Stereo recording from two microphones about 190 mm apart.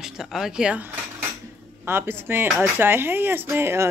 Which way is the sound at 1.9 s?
10° right (ahead or behind).